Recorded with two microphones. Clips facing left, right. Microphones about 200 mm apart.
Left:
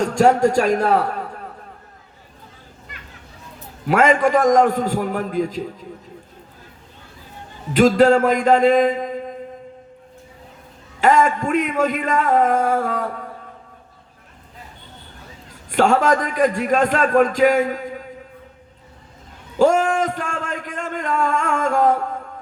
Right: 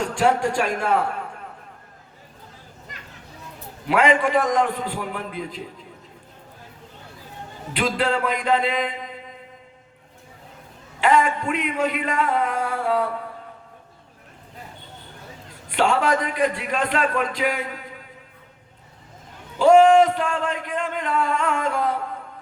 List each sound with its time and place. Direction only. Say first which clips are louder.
0.0 s a man's voice: left 6 dB; 40° left (ahead or behind)
3.8 s a man's voice: left 3 dB; 45° left (ahead or behind)
7.7 s a man's voice: left 10 dB; 45° left (ahead or behind)
11.0 s a man's voice: left 3 dB; 45° left (ahead or behind)
15.7 s a man's voice: left 4 dB; 45° left (ahead or behind)
19.5 s a man's voice: right 3 dB; 45° left (ahead or behind)